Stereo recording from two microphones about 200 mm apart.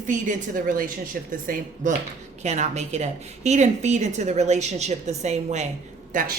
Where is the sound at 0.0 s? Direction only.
40° right (ahead or behind).